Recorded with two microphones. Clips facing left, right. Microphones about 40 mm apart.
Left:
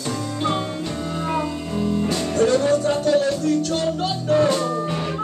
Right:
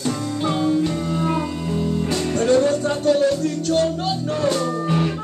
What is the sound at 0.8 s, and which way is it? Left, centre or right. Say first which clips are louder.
Music: right 5 dB; centre.